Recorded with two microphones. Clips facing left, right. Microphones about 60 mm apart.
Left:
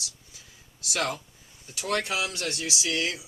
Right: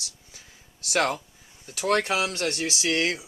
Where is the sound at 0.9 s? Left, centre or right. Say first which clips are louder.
Right 5 dB; right.